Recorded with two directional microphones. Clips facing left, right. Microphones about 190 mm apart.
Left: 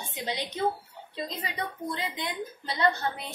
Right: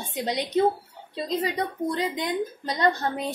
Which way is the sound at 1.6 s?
40° right (ahead or behind).